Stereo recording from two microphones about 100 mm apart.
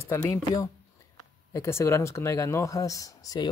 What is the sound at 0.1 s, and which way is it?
Speech, 35° left (ahead or behind).